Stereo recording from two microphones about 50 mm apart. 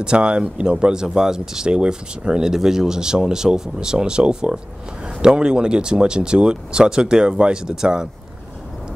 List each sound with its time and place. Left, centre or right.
0.0 s speech: centre